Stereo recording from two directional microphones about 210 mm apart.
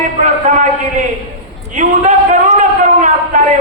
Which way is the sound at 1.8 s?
35° right (ahead or behind).